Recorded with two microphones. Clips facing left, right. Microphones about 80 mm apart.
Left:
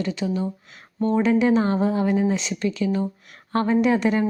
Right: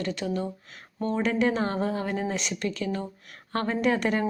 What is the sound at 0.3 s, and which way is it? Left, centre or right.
Speech, centre.